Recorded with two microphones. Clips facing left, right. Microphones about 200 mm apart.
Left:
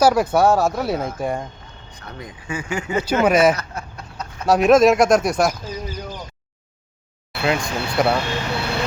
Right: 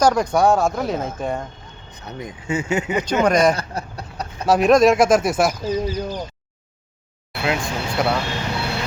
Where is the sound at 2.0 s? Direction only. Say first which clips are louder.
Right 5 dB; 20° right (ahead or behind).